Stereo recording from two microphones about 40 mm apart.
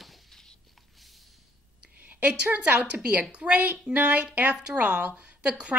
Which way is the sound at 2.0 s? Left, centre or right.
Right.